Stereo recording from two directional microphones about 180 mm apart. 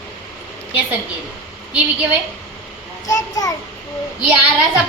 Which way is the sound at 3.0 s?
20° left (ahead or behind).